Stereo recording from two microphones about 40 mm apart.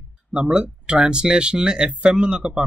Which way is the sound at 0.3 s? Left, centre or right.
Right.